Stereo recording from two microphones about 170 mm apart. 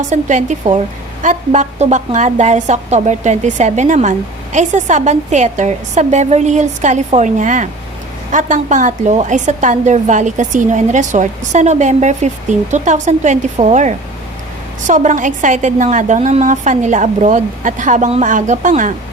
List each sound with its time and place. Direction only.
0.0 s a woman's voice: 45° right (ahead or behind)